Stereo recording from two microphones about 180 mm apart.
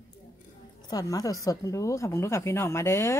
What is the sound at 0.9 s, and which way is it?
Speech, 20° left (ahead or behind).